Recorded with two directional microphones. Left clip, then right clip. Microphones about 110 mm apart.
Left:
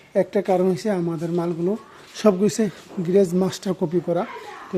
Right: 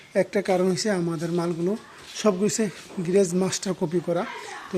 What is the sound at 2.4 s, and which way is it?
Speech, 35° left (ahead or behind).